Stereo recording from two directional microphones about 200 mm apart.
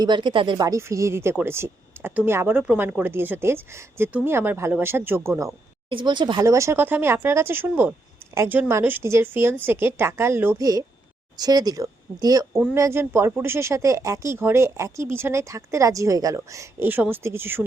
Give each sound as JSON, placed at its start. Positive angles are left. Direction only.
{"t": 0.0, "sound": "speech", "side_deg": -25}